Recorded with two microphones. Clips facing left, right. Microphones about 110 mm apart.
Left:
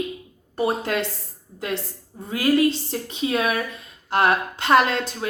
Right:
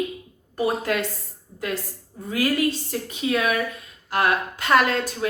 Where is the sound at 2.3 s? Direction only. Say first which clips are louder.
Left 3 dB; 25° left (ahead or behind).